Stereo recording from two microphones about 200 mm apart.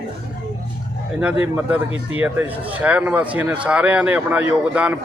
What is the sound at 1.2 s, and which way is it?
Speech, 5° right (ahead or behind).